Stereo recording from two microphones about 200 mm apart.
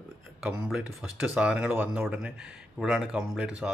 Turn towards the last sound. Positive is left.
turn(degrees=-5)  # may be behind; listen again after turning